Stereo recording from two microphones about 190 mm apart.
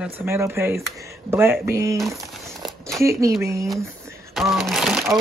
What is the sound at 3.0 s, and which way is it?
Speech, 15° right (ahead or behind).